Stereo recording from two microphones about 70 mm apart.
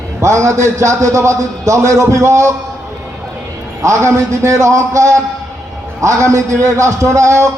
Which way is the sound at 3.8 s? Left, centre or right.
Right.